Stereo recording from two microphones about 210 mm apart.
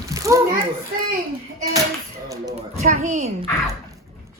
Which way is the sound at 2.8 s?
35° right (ahead or behind).